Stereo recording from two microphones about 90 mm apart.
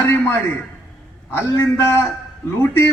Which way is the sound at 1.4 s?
25° left (ahead or behind).